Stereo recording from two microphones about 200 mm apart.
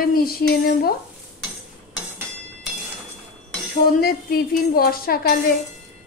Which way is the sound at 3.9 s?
50° left (ahead or behind).